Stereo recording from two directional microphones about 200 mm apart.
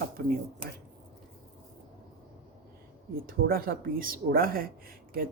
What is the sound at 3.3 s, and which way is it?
Speech, 45° right (ahead or behind).